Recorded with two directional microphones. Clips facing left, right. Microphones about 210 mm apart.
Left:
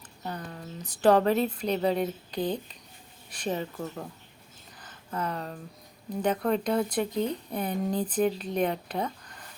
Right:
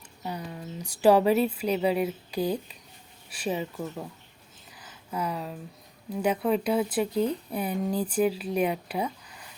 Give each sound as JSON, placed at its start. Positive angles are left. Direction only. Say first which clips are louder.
{"t": 0.2, "sound": "speech", "louder": "right 2 dB", "side_deg": -10}
{"t": 4.8, "sound": "a sound", "louder": "right 1 dB", "side_deg": -10}
{"t": 6.2, "sound": "speech", "louder": "right 1 dB", "side_deg": -5}